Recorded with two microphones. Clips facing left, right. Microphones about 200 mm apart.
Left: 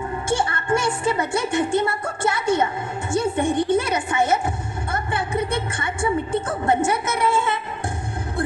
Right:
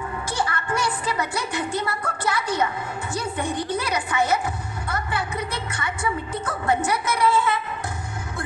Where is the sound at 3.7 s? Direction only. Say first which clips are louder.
Left 5 dB; 25° left (ahead or behind).